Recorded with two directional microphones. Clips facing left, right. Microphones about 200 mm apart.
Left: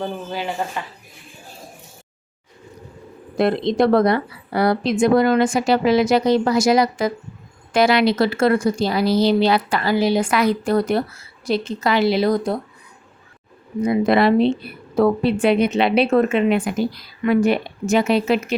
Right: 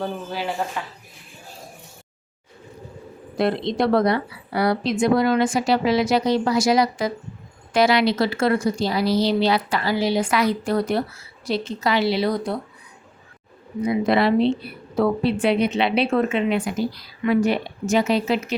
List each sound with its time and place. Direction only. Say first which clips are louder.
0.0 s speech: left 1 dB; centre (ahead or behind)
3.3 s a woman's voice: left 4 dB; 50° left (ahead or behind)
13.8 s a woman's voice: left 3 dB; 50° left (ahead or behind)